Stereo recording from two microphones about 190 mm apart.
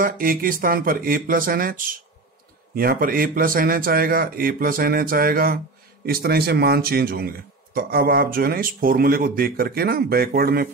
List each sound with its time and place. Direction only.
0.0 s speech: 50° right (ahead or behind)